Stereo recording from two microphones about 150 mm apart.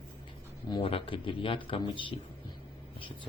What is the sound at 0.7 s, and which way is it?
Speech, 35° left (ahead or behind).